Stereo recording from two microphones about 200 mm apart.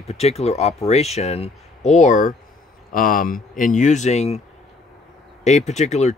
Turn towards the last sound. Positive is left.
turn(degrees=35)  # may be behind; listen again after turning